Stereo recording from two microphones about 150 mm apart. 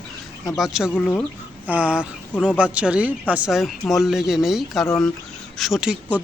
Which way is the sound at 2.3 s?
10° left (ahead or behind).